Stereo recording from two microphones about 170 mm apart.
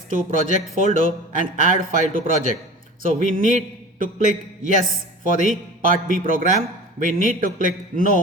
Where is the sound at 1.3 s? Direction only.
50° right (ahead or behind).